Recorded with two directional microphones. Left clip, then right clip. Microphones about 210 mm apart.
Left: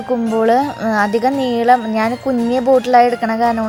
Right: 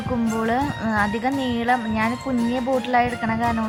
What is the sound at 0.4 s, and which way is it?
Speech, 30° left (ahead or behind).